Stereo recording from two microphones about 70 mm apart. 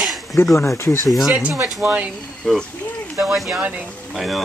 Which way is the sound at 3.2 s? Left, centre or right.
Centre.